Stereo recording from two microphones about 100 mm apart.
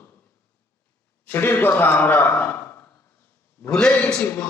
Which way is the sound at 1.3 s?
20° left (ahead or behind).